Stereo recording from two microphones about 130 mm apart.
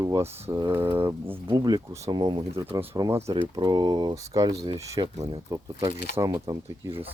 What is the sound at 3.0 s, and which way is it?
Speech, 20° right (ahead or behind).